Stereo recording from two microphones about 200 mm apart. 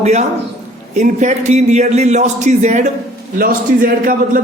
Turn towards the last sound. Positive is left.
turn(degrees=-45)  # may be behind; listen again after turning